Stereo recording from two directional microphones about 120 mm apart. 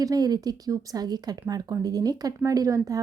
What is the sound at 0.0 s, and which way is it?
Speech, 30° right (ahead or behind).